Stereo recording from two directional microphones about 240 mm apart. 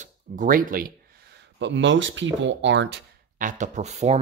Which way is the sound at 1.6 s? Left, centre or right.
Right.